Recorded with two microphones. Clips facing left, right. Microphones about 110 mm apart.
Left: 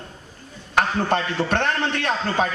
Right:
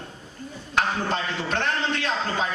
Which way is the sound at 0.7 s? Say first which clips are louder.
Left 4 dB; 55° left (ahead or behind).